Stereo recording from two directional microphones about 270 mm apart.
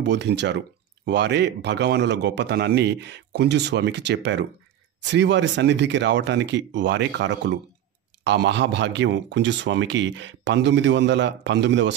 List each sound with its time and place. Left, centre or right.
0.0 s speech: right